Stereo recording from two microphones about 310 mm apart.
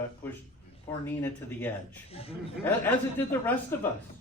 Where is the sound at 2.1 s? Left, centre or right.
Centre.